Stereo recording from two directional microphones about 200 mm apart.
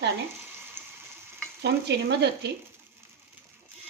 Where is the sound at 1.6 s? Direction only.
55° right (ahead or behind).